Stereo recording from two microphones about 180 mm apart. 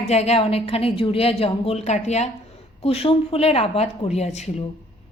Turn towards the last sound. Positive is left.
turn(degrees=35)  # may be behind; listen again after turning